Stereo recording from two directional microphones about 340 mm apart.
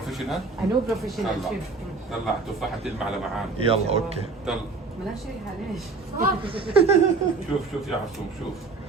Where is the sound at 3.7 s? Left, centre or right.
Centre.